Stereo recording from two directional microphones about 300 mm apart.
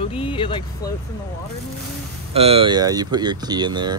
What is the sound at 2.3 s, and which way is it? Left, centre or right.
Speech, centre.